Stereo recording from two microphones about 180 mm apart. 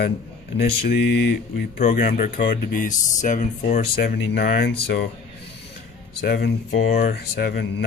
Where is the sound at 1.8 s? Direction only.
50° left (ahead or behind).